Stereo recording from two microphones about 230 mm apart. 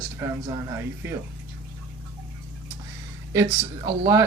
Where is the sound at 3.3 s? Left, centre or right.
Centre.